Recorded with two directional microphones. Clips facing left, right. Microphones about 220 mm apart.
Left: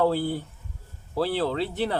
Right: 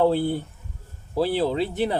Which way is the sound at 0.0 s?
25° right (ahead or behind).